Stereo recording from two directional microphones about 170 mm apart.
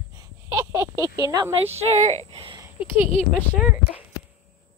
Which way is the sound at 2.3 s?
30° right (ahead or behind).